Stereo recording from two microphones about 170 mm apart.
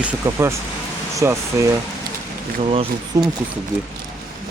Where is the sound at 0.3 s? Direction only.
15° right (ahead or behind).